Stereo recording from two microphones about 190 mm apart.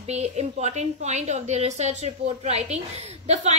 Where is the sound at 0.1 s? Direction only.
35° right (ahead or behind).